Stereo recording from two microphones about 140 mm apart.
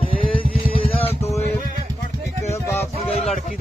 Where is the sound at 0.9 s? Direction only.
45° left (ahead or behind).